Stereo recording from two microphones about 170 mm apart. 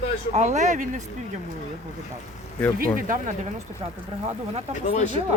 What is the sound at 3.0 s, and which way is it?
Speech, 50° right (ahead or behind).